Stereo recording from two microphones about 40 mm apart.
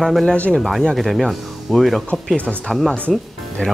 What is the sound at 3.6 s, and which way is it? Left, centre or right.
Speech, centre.